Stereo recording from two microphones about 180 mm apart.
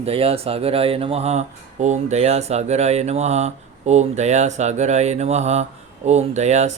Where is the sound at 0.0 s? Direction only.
35° right (ahead or behind).